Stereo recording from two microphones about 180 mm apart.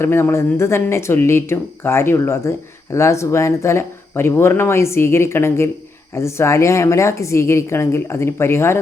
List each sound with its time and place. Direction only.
0.0 s speech: 15° left (ahead or behind)